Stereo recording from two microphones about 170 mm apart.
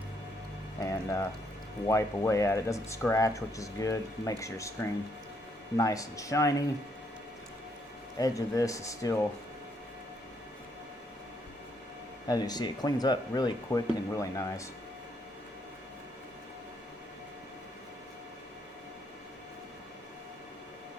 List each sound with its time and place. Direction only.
0.8 s speech: 20° left (ahead or behind)
8.2 s speech: 20° left (ahead or behind)
12.3 s speech: 25° left (ahead or behind)